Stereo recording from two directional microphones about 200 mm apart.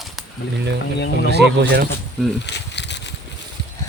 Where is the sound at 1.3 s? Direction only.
55° right (ahead or behind).